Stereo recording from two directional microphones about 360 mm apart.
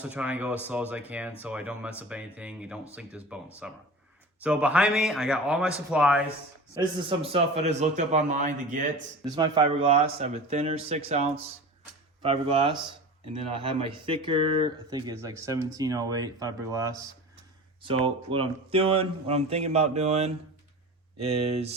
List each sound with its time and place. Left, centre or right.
0.0 s speech: centre